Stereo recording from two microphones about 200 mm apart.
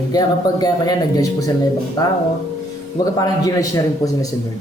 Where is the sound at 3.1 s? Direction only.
15° left (ahead or behind).